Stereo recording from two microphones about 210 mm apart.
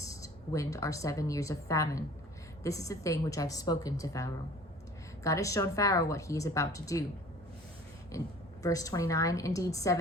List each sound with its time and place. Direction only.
0.0 s speech: 15° left (ahead or behind)
8.6 s speech: 15° left (ahead or behind)